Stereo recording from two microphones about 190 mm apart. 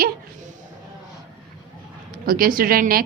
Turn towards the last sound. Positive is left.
turn(degrees=-50)  # may be behind; listen again after turning